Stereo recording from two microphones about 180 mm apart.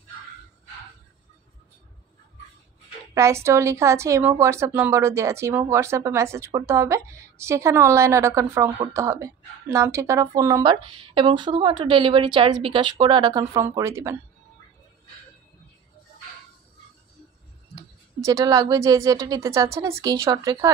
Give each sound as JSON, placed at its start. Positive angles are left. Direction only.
{"t": 3.2, "sound": "a woman's voice", "side_deg": -15}
{"t": 18.2, "sound": "speech", "side_deg": -20}